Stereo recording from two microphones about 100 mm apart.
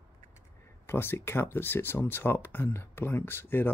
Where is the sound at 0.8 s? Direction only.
25° left (ahead or behind).